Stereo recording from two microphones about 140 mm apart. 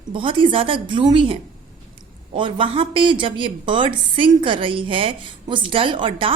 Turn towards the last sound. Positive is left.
turn(degrees=-35)  # may be behind; listen again after turning